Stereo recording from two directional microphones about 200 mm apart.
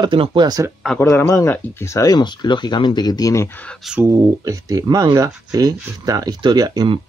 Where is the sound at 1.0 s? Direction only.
10° left (ahead or behind).